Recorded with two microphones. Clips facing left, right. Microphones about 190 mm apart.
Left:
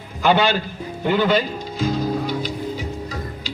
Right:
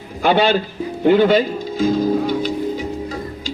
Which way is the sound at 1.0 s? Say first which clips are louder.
Right 6 dB; 50° right (ahead or behind).